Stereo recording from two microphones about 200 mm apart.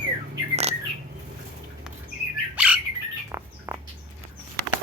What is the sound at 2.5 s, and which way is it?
Squawk, 5° right (ahead or behind).